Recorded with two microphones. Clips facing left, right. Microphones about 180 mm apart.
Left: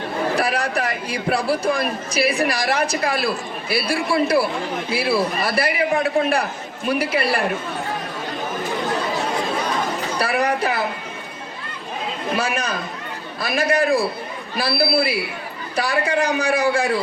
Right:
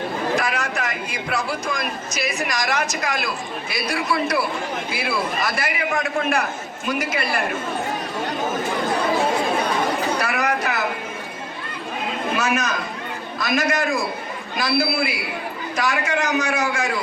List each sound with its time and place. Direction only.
0.3 s speech: 35° left (ahead or behind)
10.2 s a sound: 30° left (ahead or behind)
12.4 s speech: 30° left (ahead or behind)